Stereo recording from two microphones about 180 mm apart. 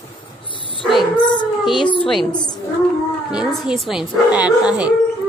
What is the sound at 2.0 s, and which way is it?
Speech, centre (ahead or behind).